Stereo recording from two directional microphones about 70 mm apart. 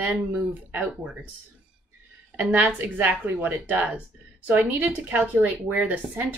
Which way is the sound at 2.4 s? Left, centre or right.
Right.